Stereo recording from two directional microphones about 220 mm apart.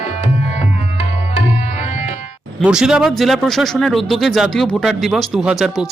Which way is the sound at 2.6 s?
5° right (ahead or behind).